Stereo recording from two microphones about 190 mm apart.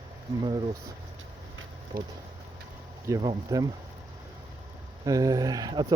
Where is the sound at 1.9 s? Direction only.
50° right (ahead or behind).